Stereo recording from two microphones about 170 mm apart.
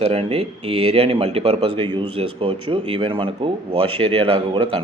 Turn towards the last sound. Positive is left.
turn(degrees=-30)  # may be behind; listen again after turning